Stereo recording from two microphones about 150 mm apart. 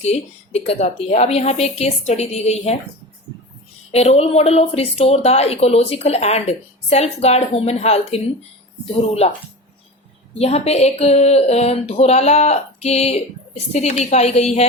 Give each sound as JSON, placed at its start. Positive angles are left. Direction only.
{"t": 0.0, "sound": "a woman's voice", "side_deg": 45}
{"t": 3.9, "sound": "a woman's voice", "side_deg": 45}
{"t": 10.3, "sound": "a woman's voice", "side_deg": 45}